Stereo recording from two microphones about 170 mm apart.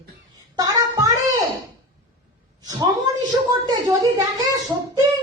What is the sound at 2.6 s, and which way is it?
A woman's voice, 20° right (ahead or behind).